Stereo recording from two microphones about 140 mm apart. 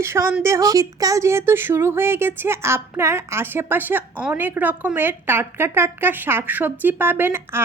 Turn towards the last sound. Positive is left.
turn(degrees=-15)  # may be behind; listen again after turning